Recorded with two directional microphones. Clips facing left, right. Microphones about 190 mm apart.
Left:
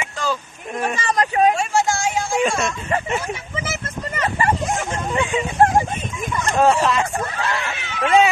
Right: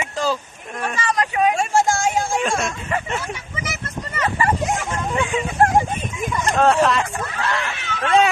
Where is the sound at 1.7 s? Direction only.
50° right (ahead or behind).